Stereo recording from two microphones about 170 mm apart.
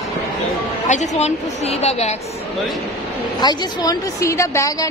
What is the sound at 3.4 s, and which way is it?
A woman's voice, 25° left (ahead or behind).